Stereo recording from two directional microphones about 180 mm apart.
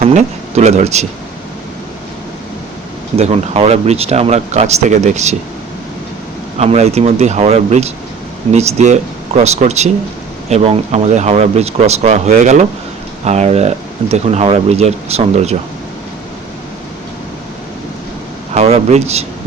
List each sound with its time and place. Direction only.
0.0 s speech: 40° right (ahead or behind)
3.2 s speech: 35° right (ahead or behind)
6.6 s speech: 35° right (ahead or behind)
18.5 s speech: 35° right (ahead or behind)